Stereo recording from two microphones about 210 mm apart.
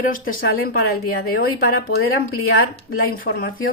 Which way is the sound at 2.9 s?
45° left (ahead or behind).